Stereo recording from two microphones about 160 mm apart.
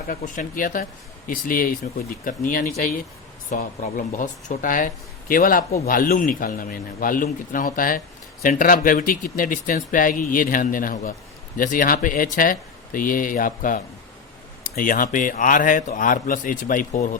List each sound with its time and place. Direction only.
0.1 s a man's voice: 60° left (ahead or behind)